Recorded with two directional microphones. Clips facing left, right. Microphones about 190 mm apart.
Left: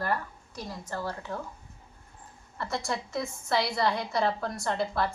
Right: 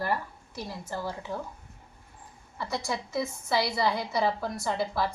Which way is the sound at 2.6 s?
Centre (ahead or behind).